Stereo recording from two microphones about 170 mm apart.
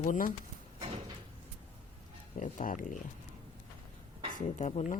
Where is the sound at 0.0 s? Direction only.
50° left (ahead or behind).